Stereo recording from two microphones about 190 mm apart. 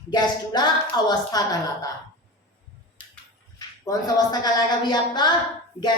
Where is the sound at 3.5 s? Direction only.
20° left (ahead or behind).